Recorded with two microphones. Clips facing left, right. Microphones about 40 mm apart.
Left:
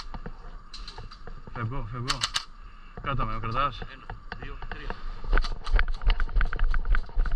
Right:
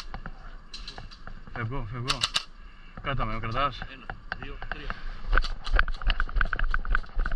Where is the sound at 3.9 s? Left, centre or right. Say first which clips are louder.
Right 4 dB; right.